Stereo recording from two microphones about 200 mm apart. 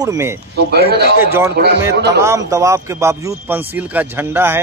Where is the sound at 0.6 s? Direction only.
55° right (ahead or behind).